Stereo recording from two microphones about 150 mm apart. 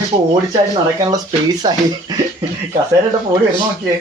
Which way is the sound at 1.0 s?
25° right (ahead or behind).